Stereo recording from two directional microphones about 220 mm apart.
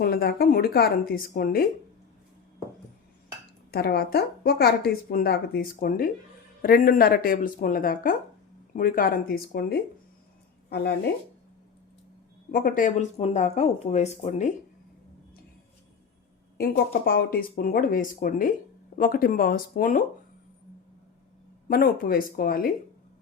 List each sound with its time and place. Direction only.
0.0 s a woman's voice: 45° left (ahead or behind)
3.7 s a woman's voice: 45° left (ahead or behind)
12.5 s speech: 40° left (ahead or behind)
16.6 s a woman's voice: 45° left (ahead or behind)
21.7 s speech: 40° left (ahead or behind)